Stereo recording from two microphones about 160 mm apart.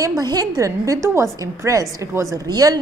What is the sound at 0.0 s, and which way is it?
A woman's voice, 25° right (ahead or behind).